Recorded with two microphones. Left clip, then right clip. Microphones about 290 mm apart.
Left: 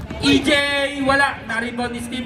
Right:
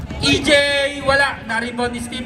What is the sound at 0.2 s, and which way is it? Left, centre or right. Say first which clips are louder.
A man's voice: right 2 dB; right.